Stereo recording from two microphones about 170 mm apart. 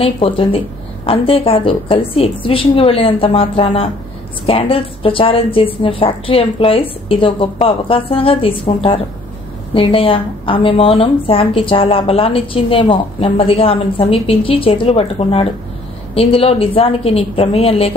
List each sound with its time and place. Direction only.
0.0 s a woman's voice: 35° left (ahead or behind)